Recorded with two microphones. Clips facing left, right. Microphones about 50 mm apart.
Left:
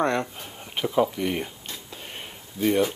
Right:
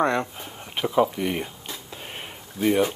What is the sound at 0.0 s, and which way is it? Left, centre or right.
Speech, centre.